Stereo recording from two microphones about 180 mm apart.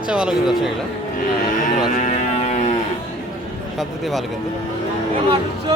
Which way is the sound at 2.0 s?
40° left (ahead or behind).